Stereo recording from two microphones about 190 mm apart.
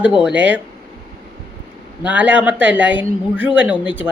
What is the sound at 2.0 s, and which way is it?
Speech, 5° right (ahead or behind).